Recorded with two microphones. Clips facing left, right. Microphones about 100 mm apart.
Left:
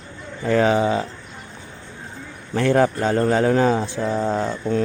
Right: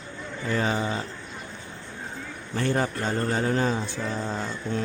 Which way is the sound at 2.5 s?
80° left.